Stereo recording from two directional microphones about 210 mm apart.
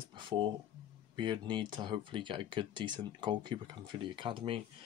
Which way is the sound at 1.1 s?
20° right (ahead or behind).